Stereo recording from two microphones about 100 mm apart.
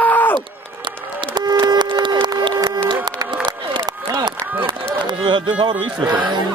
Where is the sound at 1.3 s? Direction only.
45° right (ahead or behind).